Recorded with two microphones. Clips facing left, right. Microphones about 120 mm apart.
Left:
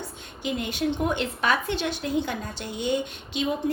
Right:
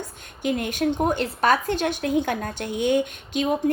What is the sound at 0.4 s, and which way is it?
A woman's voice, 50° right (ahead or behind).